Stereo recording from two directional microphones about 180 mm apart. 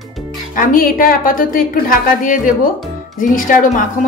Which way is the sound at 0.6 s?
50° left (ahead or behind).